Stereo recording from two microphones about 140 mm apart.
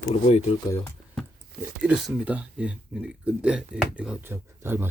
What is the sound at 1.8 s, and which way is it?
Speech, 5° right (ahead or behind).